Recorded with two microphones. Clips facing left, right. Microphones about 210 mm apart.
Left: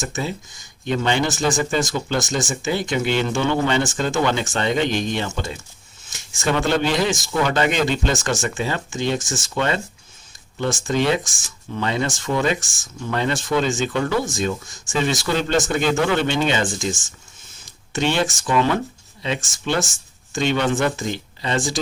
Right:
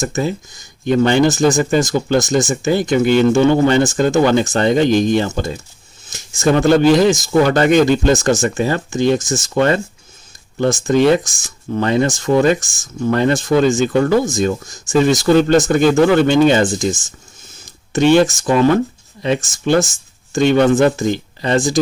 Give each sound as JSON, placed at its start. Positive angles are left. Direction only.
{"t": 0.0, "sound": "speech", "side_deg": -45}
{"t": 17.9, "sound": "speech", "side_deg": -45}